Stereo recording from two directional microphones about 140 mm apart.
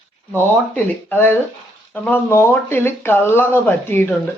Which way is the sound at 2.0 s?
15° left (ahead or behind).